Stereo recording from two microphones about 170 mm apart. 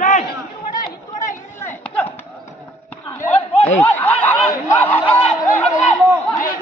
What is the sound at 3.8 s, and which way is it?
Snicker, 10° left (ahead or behind).